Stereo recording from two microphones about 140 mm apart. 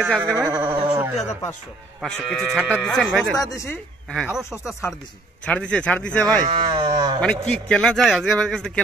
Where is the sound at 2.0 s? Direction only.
Centre (ahead or behind).